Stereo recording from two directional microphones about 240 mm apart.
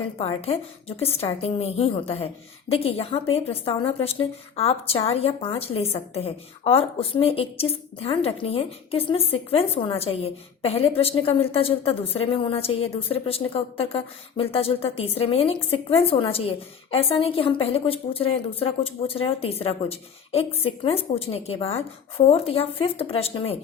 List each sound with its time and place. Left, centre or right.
0.2 s a woman's voice: left